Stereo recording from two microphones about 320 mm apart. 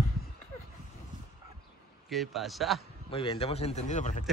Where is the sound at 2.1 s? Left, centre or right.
Centre.